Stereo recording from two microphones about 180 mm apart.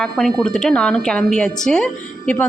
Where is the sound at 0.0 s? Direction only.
5° left (ahead or behind).